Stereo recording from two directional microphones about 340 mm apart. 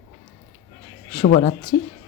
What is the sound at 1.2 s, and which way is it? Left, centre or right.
Speech, left.